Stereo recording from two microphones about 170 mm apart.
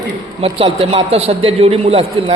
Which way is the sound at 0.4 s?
35° right (ahead or behind).